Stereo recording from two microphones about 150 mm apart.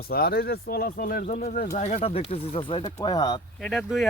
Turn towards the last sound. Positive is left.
turn(degrees=0)  # may be behind; listen again after turning